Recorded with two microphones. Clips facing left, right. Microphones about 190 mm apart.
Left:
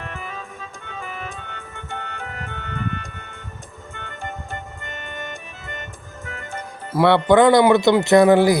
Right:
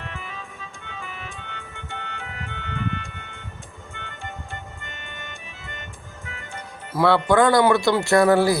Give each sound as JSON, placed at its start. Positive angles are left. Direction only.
{"t": 0.0, "sound": "music", "side_deg": 45}
{"t": 6.9, "sound": "speech", "side_deg": 20}